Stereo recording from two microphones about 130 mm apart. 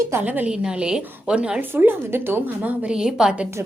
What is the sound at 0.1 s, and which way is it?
A woman's voice, 15° right (ahead or behind).